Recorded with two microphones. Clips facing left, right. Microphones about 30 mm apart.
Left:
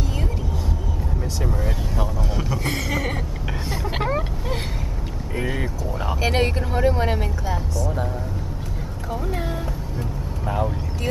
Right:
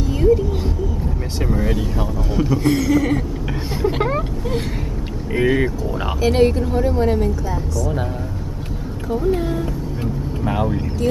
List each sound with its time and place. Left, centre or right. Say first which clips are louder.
0.1 s a sound: right 14 dB; centre
1.4 s vehicle: right 7 dB; right
1.7 s vehicle: right 5 dB; centre
2.3 s a sound: right 12 dB; centre
2.6 s speech: right 9 dB; left
3.8 s vehicle: right 6 dB; centre
5.5 s speech: right 8 dB; right
6.2 s speech: right 7 dB; centre
9.1 s speech: right 8 dB; centre